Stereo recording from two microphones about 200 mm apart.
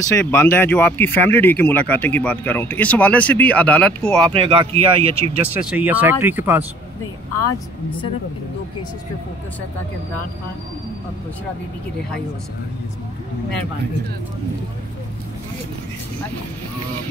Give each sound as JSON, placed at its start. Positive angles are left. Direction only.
{"t": 0.1, "sound": "speech", "side_deg": 10}
{"t": 4.3, "sound": "speech", "side_deg": -25}
{"t": 5.5, "sound": "speech", "side_deg": -5}